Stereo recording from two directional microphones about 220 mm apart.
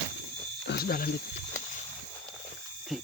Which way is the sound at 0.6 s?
45° left (ahead or behind).